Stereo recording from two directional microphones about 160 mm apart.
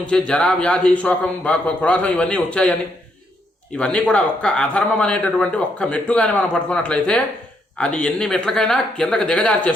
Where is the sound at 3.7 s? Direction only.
5° left (ahead or behind).